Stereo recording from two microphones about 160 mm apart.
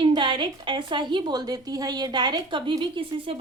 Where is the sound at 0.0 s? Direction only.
30° right (ahead or behind).